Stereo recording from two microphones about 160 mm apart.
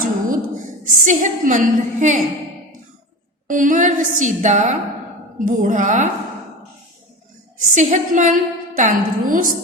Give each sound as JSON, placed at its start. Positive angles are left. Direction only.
{"t": 0.0, "sound": "a sound", "side_deg": -55}
{"t": 3.4, "sound": "a woman's voice", "side_deg": -55}
{"t": 7.7, "sound": "a woman's voice", "side_deg": -50}